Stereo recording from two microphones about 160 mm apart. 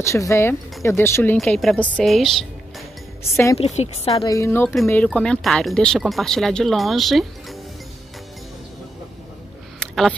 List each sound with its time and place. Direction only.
0.0 s speech: 15° left (ahead or behind)
1.4 s speech: centre (ahead or behind)
3.5 s a woman's voice: 40° left (ahead or behind)
4.2 s speech: 20° left (ahead or behind); by 7.2 s centre (ahead or behind)
9.8 s a sound: centre (ahead or behind)